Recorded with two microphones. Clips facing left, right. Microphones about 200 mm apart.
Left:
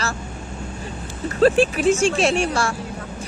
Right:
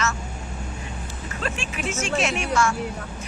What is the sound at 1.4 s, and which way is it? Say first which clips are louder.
Speech: left 15 dB; 35° left (ahead or behind).